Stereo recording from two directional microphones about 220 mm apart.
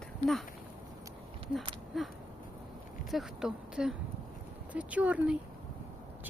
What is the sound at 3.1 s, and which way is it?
A woman's voice, centre (ahead or behind).